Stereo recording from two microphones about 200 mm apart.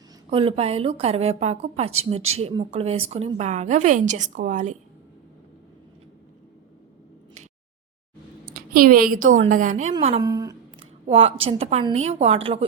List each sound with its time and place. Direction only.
0.3 s a woman's voice: 30° right (ahead or behind)
8.5 s a woman's voice: 45° right (ahead or behind); by 10.2 s 30° right (ahead or behind)
10.2 s a sound: 15° right (ahead or behind)
11.0 s a woman's voice: 30° right (ahead or behind)